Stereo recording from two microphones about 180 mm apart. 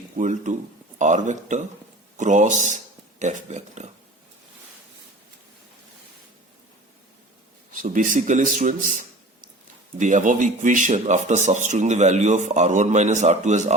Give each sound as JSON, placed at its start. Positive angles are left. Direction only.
{"t": 0.2, "sound": "a man's voice", "side_deg": -45}
{"t": 7.7, "sound": "a man's voice", "side_deg": -45}